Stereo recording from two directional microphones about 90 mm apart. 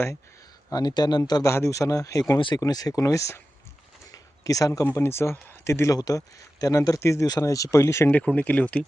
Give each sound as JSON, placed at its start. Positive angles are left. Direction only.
{"t": 0.7, "sound": "speech", "side_deg": 50}
{"t": 1.2, "sound": "speech", "side_deg": 40}
{"t": 4.1, "sound": "a sound", "side_deg": 40}
{"t": 4.9, "sound": "speech", "side_deg": 30}
{"t": 8.1, "sound": "speech", "side_deg": 15}